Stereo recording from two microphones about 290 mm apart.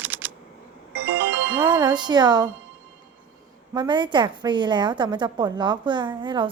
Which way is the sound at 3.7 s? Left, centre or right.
Centre.